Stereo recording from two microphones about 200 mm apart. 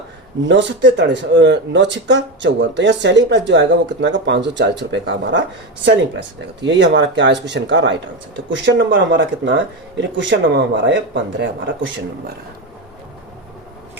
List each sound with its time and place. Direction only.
0.4 s speech: 65° right (ahead or behind)
6.7 s speech: 60° right (ahead or behind)